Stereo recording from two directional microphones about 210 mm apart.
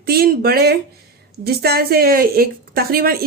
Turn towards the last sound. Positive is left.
turn(degrees=-45)  # may be behind; listen again after turning